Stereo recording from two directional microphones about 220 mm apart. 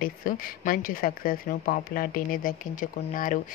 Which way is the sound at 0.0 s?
40° left (ahead or behind).